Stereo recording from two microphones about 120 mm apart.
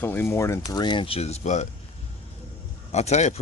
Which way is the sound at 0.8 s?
40° left (ahead or behind).